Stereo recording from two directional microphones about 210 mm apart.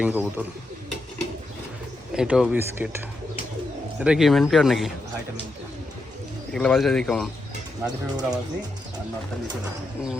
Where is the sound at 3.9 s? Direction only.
5° right (ahead or behind).